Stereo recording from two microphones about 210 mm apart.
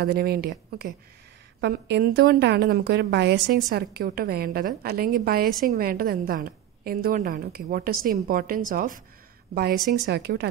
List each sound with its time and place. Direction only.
0.0 s a woman's voice: 45° right (ahead or behind)